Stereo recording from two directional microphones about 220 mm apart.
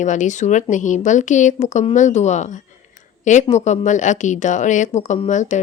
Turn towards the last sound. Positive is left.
turn(degrees=35)  # may be behind; listen again after turning